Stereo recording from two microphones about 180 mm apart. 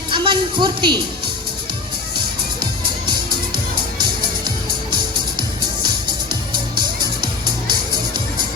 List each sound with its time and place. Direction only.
0.1 s music: 25° right (ahead or behind)
7.7 s music: 25° right (ahead or behind)